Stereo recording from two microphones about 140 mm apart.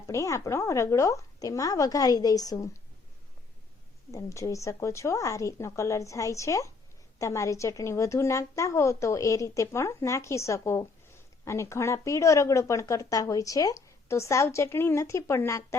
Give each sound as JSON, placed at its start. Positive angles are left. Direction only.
{"t": 0.1, "sound": "speech", "side_deg": 20}
{"t": 4.1, "sound": "speech", "side_deg": 25}